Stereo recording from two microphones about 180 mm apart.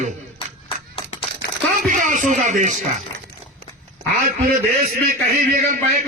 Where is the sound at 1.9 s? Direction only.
45° right (ahead or behind).